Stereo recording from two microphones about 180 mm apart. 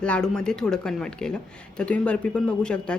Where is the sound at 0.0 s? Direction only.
5° left (ahead or behind).